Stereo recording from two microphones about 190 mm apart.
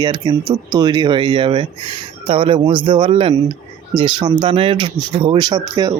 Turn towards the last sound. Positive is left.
turn(degrees=-20)  # may be behind; listen again after turning